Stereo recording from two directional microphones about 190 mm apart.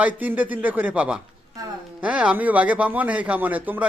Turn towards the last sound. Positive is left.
turn(degrees=-10)  # may be behind; listen again after turning